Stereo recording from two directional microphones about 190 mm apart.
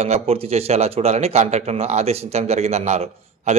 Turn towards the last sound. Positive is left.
turn(degrees=-35)  # may be behind; listen again after turning